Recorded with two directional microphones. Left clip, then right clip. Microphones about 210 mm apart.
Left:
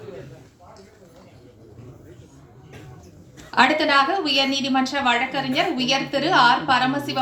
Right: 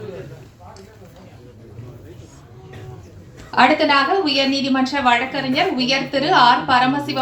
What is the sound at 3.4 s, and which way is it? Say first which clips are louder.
A woman's voice: right 3 dB; 45° left (ahead or behind).